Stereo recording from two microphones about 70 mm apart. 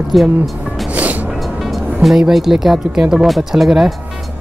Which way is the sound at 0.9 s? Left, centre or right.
Right.